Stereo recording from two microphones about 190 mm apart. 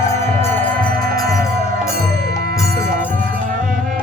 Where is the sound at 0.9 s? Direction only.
50° right (ahead or behind).